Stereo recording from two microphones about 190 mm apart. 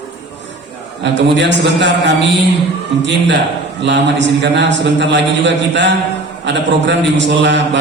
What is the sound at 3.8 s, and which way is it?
A man's voice, 70° right (ahead or behind).